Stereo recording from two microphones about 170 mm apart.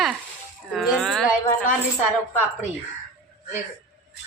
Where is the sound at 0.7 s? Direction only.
Centre (ahead or behind).